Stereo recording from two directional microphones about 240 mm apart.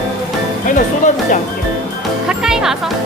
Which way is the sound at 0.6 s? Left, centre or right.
Left.